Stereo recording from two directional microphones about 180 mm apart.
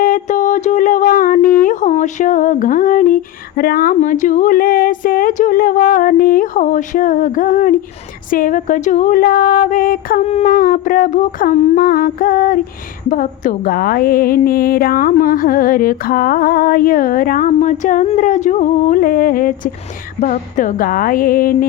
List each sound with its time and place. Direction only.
0.0 s a sound: 45° left (ahead or behind)
1.6 s a woman's voice: 45° left (ahead or behind)
10.2 s a woman's voice: 40° left (ahead or behind)